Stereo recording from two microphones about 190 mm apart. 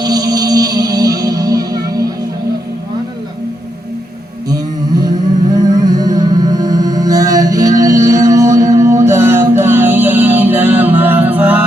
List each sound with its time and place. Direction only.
0.0 s music: 20° right (ahead or behind)
4.4 s music: 20° right (ahead or behind)